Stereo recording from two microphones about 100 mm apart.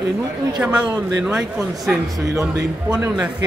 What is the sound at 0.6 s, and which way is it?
Speech, 10° right (ahead or behind).